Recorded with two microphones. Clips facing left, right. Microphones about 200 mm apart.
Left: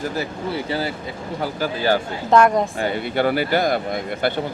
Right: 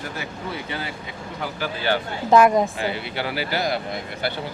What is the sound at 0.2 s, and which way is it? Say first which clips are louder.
Speech: left 6 dB; 35° left (ahead or behind).